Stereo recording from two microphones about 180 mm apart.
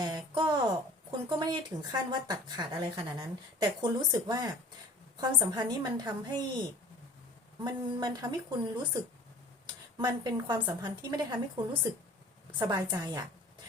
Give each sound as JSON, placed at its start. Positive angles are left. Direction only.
{"t": 0.0, "sound": "a sound", "side_deg": -25}
{"t": 1.3, "sound": "a woman's voice", "side_deg": -25}
{"t": 7.6, "sound": "a woman's voice", "side_deg": -25}
{"t": 10.0, "sound": "a woman's voice", "side_deg": -25}